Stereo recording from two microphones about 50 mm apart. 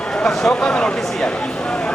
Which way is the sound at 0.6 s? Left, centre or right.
Centre.